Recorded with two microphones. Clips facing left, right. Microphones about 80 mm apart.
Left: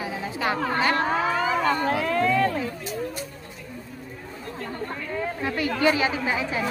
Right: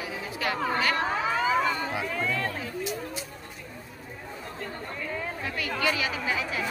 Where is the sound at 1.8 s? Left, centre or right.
Left.